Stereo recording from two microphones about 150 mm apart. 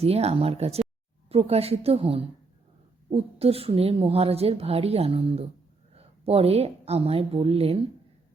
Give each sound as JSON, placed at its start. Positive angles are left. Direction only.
{"t": 0.0, "sound": "a woman's voice", "side_deg": -45}